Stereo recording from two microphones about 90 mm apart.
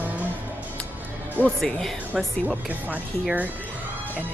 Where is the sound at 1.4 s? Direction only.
5° left (ahead or behind).